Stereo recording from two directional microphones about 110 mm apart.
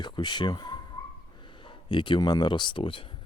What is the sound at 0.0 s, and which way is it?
Speech, 45° left (ahead or behind).